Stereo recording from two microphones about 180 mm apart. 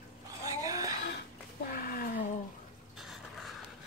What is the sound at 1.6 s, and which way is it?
Wild animals, 50° left (ahead or behind).